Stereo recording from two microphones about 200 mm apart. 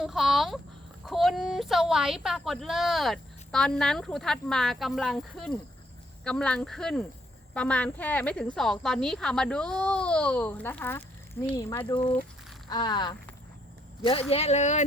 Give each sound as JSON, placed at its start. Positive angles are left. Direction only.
{"t": 0.0, "sound": "a woman's voice", "side_deg": 0}